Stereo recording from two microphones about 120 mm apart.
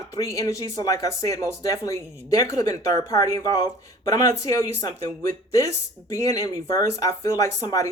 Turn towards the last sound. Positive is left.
turn(degrees=25)  # may be behind; listen again after turning